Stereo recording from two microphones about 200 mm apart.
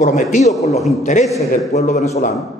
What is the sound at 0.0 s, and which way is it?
A man's voice, 35° left (ahead or behind).